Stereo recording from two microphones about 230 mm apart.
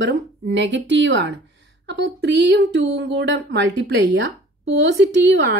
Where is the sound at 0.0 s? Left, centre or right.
Right.